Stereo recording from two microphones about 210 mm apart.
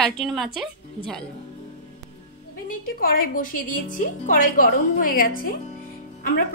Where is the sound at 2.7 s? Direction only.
45° left (ahead or behind).